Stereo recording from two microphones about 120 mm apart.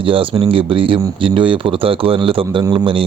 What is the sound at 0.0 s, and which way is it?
Speech, 45° right (ahead or behind).